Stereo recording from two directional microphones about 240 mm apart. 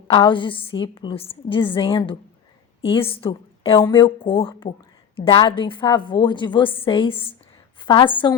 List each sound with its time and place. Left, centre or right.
0.1 s a woman's voice: centre